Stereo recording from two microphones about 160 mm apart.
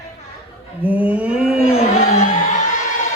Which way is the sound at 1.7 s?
40° left (ahead or behind).